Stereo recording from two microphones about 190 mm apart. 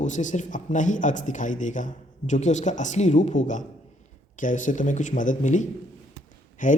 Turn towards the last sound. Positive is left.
turn(degrees=45)  # may be behind; listen again after turning